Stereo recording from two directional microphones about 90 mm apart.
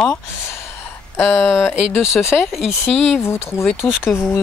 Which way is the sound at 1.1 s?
25° left (ahead or behind).